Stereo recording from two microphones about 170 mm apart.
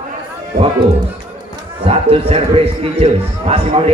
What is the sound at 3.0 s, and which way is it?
Speech, 35° right (ahead or behind).